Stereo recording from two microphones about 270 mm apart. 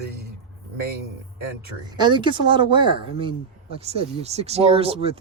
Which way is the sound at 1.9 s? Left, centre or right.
Centre.